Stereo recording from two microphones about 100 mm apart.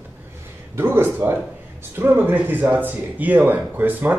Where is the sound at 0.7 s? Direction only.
25° right (ahead or behind).